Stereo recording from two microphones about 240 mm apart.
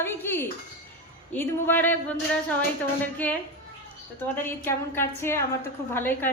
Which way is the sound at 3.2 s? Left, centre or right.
Centre.